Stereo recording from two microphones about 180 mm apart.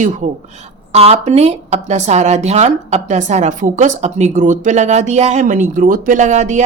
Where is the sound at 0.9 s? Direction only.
35° right (ahead or behind).